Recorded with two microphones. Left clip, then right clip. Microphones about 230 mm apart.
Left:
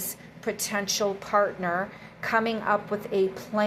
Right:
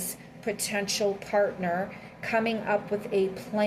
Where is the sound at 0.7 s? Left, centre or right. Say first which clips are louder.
Left 2 dB; left.